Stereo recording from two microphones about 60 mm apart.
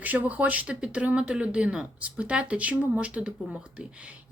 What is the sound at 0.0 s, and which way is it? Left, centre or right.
Speech, right.